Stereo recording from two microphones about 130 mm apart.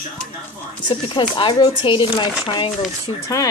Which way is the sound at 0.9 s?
40° left (ahead or behind).